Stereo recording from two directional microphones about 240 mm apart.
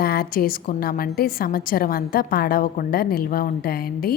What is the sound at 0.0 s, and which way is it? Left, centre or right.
A woman's voice, left.